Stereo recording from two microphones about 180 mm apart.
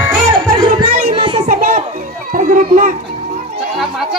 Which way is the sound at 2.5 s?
45° right (ahead or behind).